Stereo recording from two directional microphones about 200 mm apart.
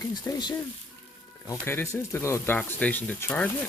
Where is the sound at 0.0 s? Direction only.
20° left (ahead or behind).